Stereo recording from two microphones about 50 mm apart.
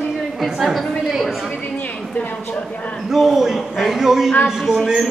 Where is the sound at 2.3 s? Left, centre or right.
Left.